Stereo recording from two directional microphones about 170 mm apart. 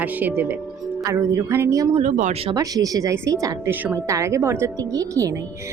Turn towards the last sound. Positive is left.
turn(degrees=-20)  # may be behind; listen again after turning